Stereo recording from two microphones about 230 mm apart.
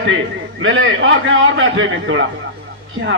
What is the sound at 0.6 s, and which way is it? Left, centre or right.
A man's voice, right.